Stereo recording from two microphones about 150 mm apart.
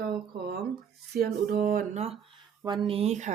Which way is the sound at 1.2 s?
90° right.